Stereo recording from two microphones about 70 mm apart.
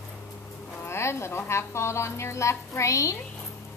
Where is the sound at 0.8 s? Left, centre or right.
Left.